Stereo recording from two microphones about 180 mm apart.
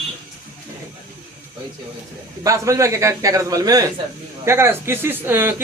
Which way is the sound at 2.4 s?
15° right (ahead or behind).